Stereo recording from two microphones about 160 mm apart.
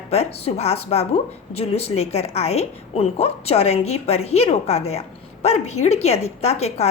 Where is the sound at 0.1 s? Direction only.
40° left (ahead or behind).